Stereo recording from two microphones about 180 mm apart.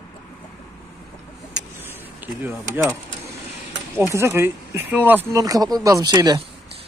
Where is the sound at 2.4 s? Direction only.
10° right (ahead or behind).